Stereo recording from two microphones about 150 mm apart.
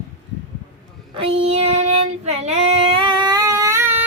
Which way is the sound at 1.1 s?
40° right (ahead or behind).